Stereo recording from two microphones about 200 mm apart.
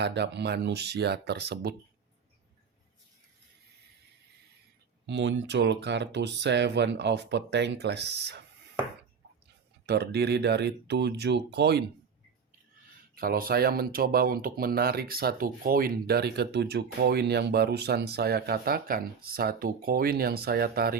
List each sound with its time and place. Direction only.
0.0 s speech: 60° right (ahead or behind)
5.0 s speech: 60° right (ahead or behind)
9.8 s speech: 55° right (ahead or behind)
13.1 s speech: 50° right (ahead or behind)